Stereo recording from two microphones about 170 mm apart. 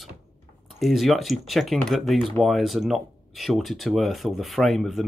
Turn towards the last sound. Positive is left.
turn(degrees=0)  # may be behind; listen again after turning